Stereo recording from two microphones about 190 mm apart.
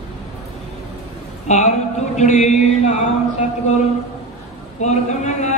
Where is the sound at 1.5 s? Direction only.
35° left (ahead or behind).